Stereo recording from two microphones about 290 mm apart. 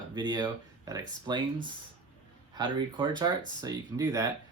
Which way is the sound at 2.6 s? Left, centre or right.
Centre.